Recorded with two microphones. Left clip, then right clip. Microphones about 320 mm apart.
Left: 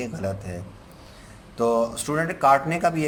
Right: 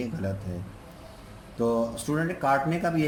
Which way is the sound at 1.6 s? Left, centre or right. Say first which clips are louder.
Left 5 dB; left.